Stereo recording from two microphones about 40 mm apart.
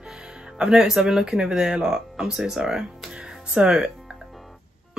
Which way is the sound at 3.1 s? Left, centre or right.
Right.